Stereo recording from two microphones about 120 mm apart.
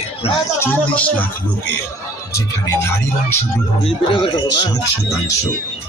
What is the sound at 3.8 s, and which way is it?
Speech, 55° left (ahead or behind).